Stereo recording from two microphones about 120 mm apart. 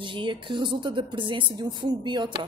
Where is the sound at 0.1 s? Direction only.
45° right (ahead or behind).